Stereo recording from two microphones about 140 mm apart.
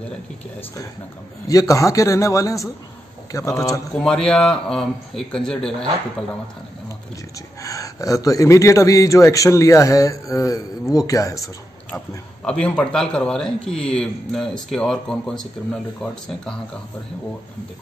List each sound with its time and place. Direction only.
1.5 s a man's voice: 25° left (ahead or behind)
4.3 s a man's voice: 5° left (ahead or behind)
7.6 s a man's voice: 25° left (ahead or behind)
12.4 s a man's voice: 10° left (ahead or behind)